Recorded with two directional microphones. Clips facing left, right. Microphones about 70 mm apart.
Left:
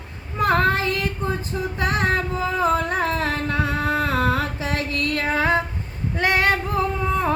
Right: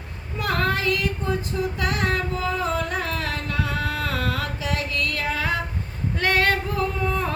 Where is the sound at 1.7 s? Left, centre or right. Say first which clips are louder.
Left 6 dB; left.